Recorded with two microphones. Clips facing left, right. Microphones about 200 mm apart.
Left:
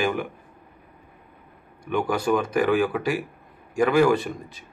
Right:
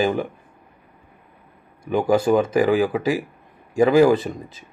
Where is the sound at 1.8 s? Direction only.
25° right (ahead or behind).